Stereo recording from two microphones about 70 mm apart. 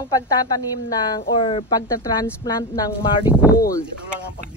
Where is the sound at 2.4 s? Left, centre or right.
Left.